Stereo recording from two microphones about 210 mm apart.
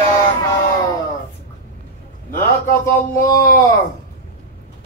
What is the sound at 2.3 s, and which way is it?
A man's voice, 10° left (ahead or behind).